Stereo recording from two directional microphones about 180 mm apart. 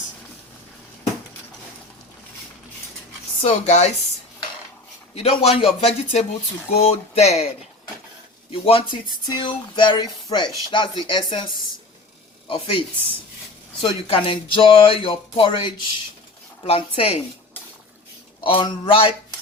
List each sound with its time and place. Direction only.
3.4 s speech: 40° left (ahead or behind)
5.1 s speech: 35° left (ahead or behind)
8.5 s speech: 30° left (ahead or behind)
13.8 s speech: 30° left (ahead or behind)
18.4 s speech: 30° left (ahead or behind)